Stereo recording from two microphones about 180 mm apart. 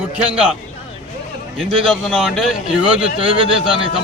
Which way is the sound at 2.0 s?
Centre (ahead or behind).